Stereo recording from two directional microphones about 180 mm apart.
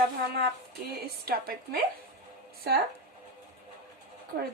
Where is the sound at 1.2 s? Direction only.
60° right (ahead or behind).